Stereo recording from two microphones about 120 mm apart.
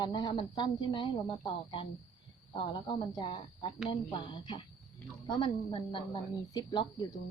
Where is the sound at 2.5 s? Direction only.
40° left (ahead or behind).